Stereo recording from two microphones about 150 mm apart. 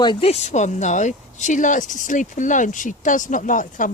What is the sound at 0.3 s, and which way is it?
Speech, 45° left (ahead or behind).